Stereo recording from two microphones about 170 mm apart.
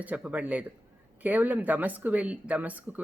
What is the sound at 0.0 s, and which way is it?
Speech, 10° right (ahead or behind).